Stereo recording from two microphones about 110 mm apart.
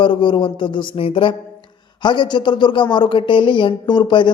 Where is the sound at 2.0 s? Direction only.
45° left (ahead or behind).